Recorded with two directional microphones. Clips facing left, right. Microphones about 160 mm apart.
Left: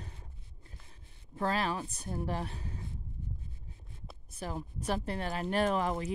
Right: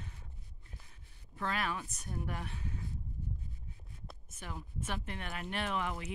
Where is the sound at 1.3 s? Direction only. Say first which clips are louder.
Left 5 dB; 35° left (ahead or behind).